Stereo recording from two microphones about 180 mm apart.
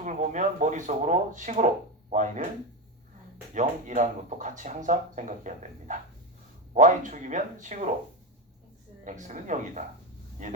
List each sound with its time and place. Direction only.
0.0 s speech: 45° right (ahead or behind)
3.5 s speech: 45° right (ahead or behind)
9.0 s speech: 45° right (ahead or behind)